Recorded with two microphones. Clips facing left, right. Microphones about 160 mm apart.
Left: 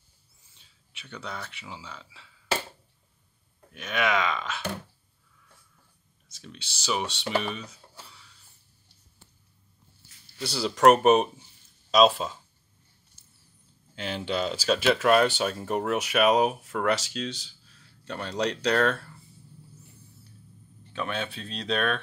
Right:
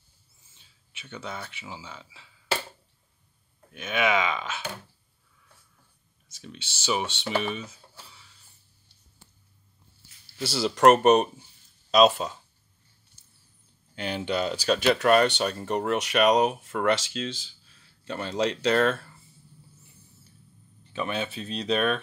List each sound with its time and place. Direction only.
0.9 s speech: 5° right (ahead or behind)
3.7 s speech: centre (ahead or behind)
6.3 s speech: centre (ahead or behind)
10.4 s speech: centre (ahead or behind)
13.9 s speech: centre (ahead or behind)
20.9 s speech: centre (ahead or behind)